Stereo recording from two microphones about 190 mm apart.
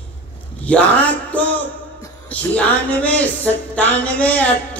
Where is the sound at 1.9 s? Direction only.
15° left (ahead or behind).